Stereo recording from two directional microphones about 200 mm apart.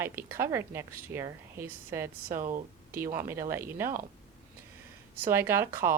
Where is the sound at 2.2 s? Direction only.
40° right (ahead or behind).